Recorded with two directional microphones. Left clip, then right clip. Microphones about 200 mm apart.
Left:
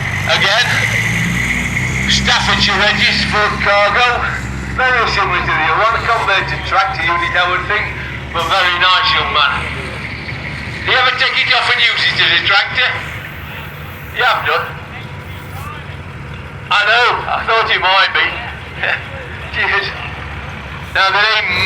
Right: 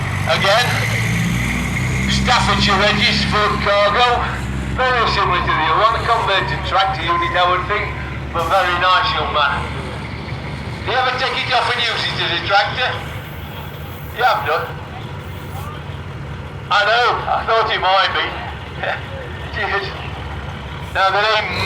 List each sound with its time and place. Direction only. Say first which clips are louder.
0.3 s vehicle: left 2 dB; 60° right (ahead or behind)
2.0 s a man's voice: left 2 dB; 60° right (ahead or behind)
8.3 s a man's voice: left 2 dB; 40° right (ahead or behind)
10.8 s a man's voice: left 5 dB; 35° right (ahead or behind)
14.2 s speech: left 3 dB; 45° right (ahead or behind)
16.6 s speech: left 3 dB; 45° right (ahead or behind)
20.9 s speech: left 3 dB; 45° right (ahead or behind)